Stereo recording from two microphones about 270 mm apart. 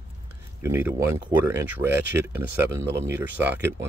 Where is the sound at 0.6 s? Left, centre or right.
Centre.